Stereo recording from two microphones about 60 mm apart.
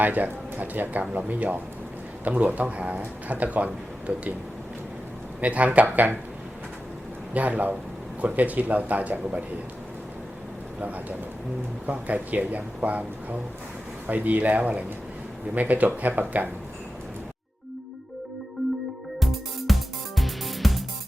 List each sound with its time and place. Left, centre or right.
0.0 s speech: right
5.4 s speech: right
7.3 s speech: right
10.8 s speech: right
14.1 s speech: right
18.6 s music: centre